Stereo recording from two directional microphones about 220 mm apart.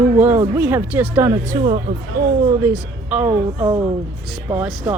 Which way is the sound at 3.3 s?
20° right (ahead or behind).